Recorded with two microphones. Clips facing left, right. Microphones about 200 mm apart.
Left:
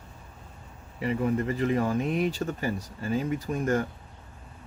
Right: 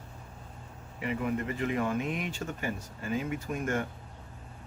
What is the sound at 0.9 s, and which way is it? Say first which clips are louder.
Speech: left 5 dB; 35° left (ahead or behind).